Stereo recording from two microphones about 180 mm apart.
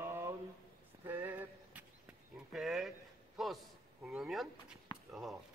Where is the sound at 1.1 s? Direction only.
10° right (ahead or behind).